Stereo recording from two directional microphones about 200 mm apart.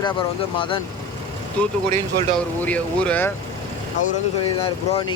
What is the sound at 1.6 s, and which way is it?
Speech, 5° left (ahead or behind).